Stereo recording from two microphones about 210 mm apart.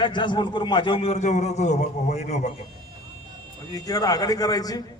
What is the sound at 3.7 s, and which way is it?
A man's voice, 15° left (ahead or behind).